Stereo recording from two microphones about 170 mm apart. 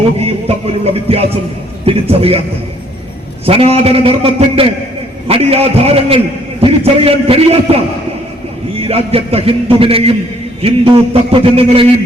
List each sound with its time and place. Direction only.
0.4 s a man's voice: 35° right (ahead or behind)
3.4 s a man's voice: 35° right (ahead or behind)
8.8 s a man's voice: 35° right (ahead or behind)